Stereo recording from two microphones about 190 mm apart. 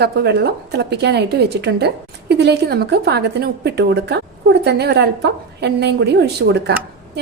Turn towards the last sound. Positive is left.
turn(degrees=-60)  # may be behind; listen again after turning